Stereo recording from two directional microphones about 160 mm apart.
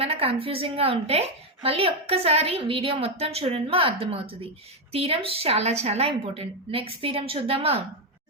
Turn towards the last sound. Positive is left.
turn(degrees=-35)  # may be behind; listen again after turning